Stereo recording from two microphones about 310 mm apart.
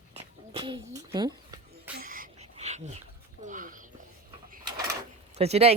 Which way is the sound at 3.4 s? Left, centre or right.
Right.